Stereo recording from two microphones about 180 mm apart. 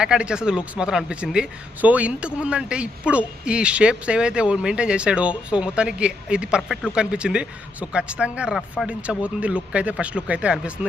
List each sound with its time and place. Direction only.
0.0 s speech: 5° right (ahead or behind)